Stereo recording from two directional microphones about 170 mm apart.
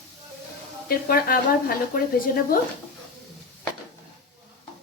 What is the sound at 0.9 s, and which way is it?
Speech, 60° left (ahead or behind).